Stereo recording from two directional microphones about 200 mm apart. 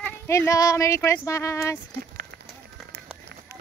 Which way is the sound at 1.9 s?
55° right (ahead or behind).